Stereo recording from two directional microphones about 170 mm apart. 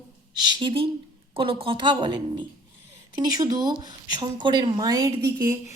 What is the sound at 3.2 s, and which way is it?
Speech, 20° right (ahead or behind).